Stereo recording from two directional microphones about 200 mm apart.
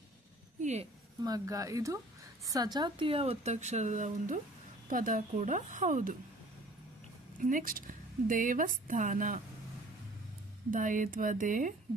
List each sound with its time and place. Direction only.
0.6 s a sound: 35° right (ahead or behind)
1.2 s a woman's voice: 20° right (ahead or behind); by 6.1 s 40° right (ahead or behind)
7.3 s a woman's voice: 40° right (ahead or behind)
10.7 s a woman's voice: 40° right (ahead or behind)